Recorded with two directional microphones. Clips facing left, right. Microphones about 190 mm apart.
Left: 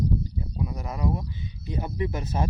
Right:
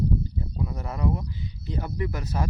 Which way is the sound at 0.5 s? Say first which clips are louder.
Left 1 dB; 10° left (ahead or behind).